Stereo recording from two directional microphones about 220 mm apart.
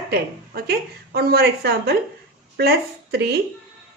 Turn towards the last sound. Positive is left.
turn(degrees=-45)  # may be behind; listen again after turning